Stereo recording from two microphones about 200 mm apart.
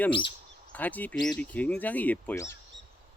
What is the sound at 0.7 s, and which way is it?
Speech, 10° left (ahead or behind).